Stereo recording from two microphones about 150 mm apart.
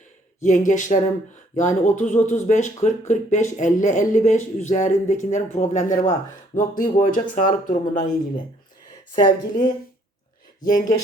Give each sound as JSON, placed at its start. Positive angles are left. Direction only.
{"t": 0.3, "sound": "speech", "side_deg": 55}
{"t": 9.1, "sound": "speech", "side_deg": 25}
{"t": 10.6, "sound": "speech", "side_deg": 65}